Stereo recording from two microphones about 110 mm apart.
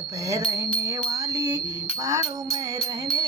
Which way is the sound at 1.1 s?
35° right (ahead or behind).